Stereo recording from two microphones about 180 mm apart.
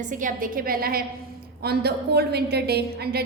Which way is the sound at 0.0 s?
45° right (ahead or behind).